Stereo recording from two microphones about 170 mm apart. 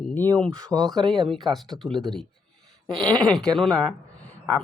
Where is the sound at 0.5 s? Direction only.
20° right (ahead or behind).